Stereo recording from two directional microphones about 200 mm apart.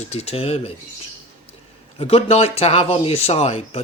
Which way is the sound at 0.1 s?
30° left (ahead or behind).